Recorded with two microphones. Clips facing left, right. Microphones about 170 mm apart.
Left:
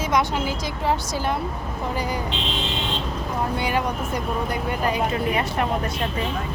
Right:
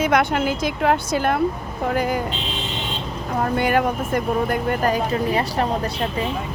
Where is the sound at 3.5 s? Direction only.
50° right (ahead or behind); by 5.7 s 35° right (ahead or behind).